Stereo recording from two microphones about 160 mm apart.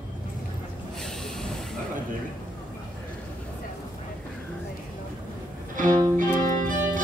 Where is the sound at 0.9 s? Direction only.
5° left (ahead or behind).